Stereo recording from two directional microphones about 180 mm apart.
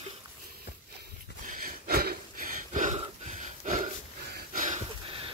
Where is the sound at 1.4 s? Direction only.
50° right (ahead or behind).